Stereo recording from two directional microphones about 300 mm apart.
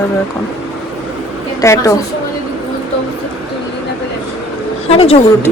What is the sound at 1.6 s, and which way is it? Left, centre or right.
Speech, centre.